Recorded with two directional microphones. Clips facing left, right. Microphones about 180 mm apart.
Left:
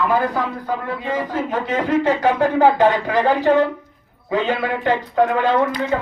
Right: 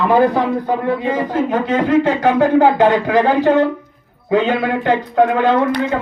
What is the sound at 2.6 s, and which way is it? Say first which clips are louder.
Speech: right 2 dB; 15° right (ahead or behind).